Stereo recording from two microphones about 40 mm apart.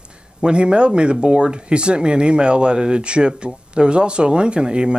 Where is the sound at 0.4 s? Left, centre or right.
Right.